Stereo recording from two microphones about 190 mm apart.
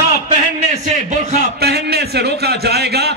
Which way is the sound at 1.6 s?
60° right (ahead or behind).